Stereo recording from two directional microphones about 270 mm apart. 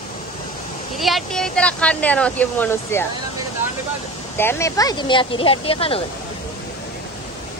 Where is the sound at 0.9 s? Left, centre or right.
Centre.